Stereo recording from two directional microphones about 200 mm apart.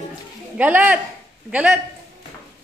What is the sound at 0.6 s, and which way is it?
A woman's voice, 10° right (ahead or behind).